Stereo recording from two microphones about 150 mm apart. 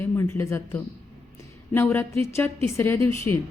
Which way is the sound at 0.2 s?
15° left (ahead or behind).